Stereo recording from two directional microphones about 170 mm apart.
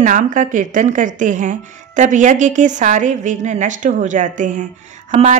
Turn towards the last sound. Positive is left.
turn(degrees=-45)  # may be behind; listen again after turning